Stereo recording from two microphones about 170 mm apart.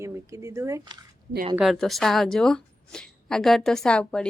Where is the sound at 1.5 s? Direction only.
Centre (ahead or behind).